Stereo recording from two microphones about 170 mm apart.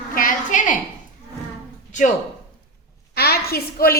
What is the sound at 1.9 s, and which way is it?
Speech, 45° left (ahead or behind).